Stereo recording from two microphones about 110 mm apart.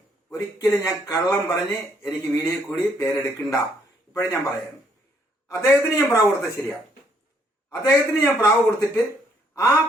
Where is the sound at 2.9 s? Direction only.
25° left (ahead or behind).